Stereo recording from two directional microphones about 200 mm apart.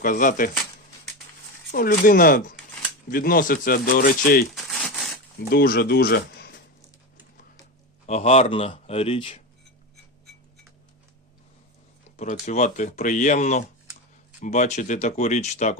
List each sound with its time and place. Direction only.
0.0 s speech: 40° left (ahead or behind)
1.7 s speech: 45° left (ahead or behind)
4.5 s a sound: centre (ahead or behind)
5.5 s speech: 50° left (ahead or behind)
8.0 s speech: 35° left (ahead or behind)
12.1 s speech: 35° left (ahead or behind)